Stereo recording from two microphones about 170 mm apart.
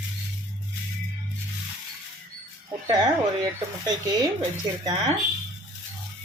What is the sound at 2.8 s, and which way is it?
Speech, 25° right (ahead or behind).